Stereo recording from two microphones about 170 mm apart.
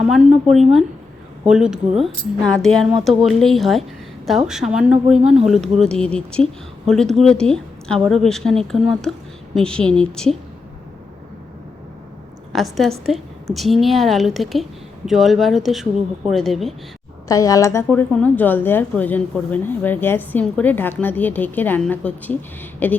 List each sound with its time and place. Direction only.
0.5 s speech: centre (ahead or behind)
12.5 s speech: centre (ahead or behind)
17.2 s a woman's voice: 20° left (ahead or behind)